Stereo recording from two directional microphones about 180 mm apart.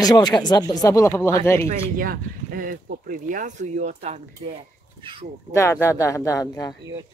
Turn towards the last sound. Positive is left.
turn(degrees=20)  # may be behind; listen again after turning